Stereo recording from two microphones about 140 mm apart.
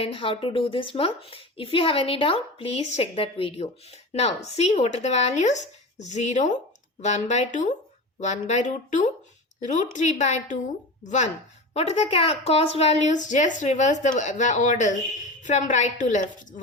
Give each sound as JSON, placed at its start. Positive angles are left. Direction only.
{"t": 0.0, "sound": "a woman's voice", "side_deg": 40}